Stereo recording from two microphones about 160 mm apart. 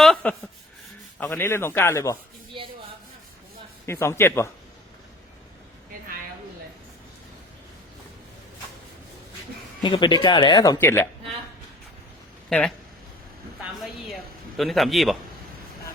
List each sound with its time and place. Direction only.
0.0 s a man's voice: 5° left (ahead or behind)
2.5 s rub: 30° right (ahead or behind)
3.8 s a man's voice: 15° left (ahead or behind)
9.8 s speech: 30° left (ahead or behind)
12.5 s speech: 5° left (ahead or behind)
13.8 s a man's voice: centre (ahead or behind)